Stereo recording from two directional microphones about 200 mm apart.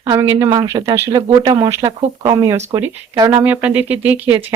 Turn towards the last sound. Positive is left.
turn(degrees=-10)  # may be behind; listen again after turning